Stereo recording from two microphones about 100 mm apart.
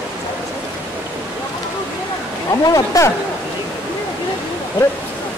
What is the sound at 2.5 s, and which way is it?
Speech, 35° left (ahead or behind).